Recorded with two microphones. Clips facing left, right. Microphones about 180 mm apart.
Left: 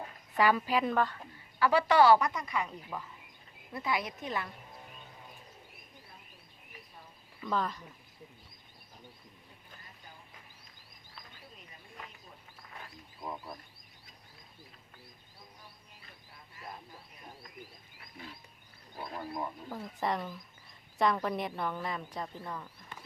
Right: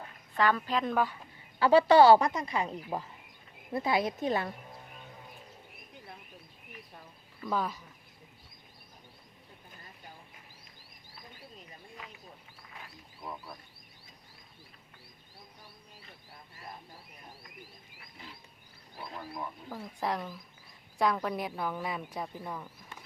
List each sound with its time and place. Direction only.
0.3 s a woman's voice: 10° left (ahead or behind)
0.9 s speech: 10° right (ahead or behind)
1.5 s speech: 25° right (ahead or behind)
7.4 s speech: 5° right (ahead or behind)
13.2 s a sound: 15° left (ahead or behind)
19.1 s speech: 20° left (ahead or behind)
19.7 s speech: centre (ahead or behind)